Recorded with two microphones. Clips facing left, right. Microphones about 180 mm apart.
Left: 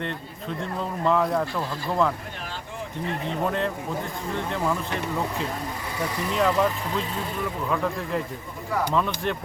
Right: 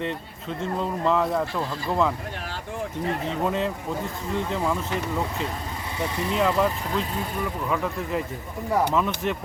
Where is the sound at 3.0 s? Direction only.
35° right (ahead or behind).